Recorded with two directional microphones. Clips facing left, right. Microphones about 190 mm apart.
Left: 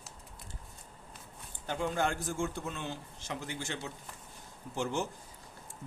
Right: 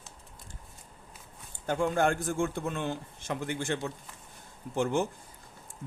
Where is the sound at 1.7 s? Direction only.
50° right (ahead or behind).